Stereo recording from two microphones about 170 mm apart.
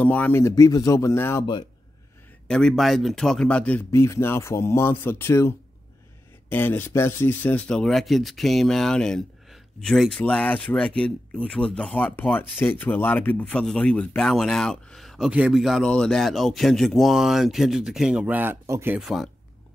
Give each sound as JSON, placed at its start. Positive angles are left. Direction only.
{"t": 0.0, "sound": "a man's voice", "side_deg": 10}
{"t": 2.4, "sound": "a man's voice", "side_deg": 5}